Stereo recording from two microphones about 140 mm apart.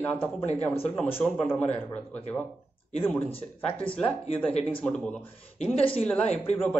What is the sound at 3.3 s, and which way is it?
Speech, 40° left (ahead or behind).